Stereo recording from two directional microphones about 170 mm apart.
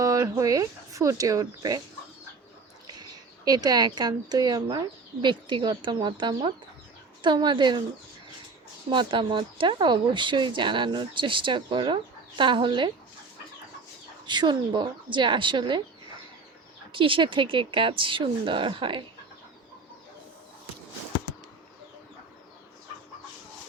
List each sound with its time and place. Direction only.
0.0 s speech: 20° right (ahead or behind)
2.8 s speech: 25° right (ahead or behind)
8.9 s speech: 30° right (ahead or behind)
14.3 s speech: 25° right (ahead or behind)
16.9 s speech: 30° right (ahead or behind)